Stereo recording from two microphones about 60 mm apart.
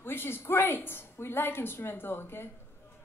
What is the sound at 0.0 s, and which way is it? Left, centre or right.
A woman's voice, left.